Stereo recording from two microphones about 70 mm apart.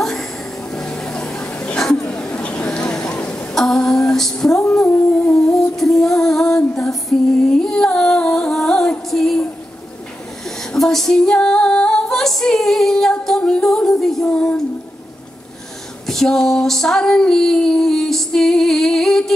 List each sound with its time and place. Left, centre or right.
0.0 s a sound: centre
3.5 s female singing: centre
4.8 s music: centre
9.1 s a sound: centre
10.6 s female singing: centre
16.1 s female singing: centre